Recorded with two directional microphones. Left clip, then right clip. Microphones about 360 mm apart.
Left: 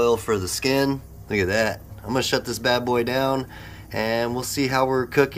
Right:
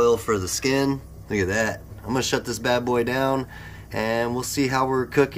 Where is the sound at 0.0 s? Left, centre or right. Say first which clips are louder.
Right 1 dB; centre.